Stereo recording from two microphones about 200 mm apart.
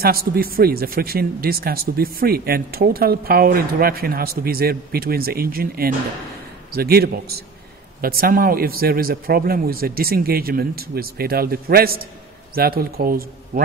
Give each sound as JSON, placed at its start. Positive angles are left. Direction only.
{"t": 0.0, "sound": "speech", "side_deg": -50}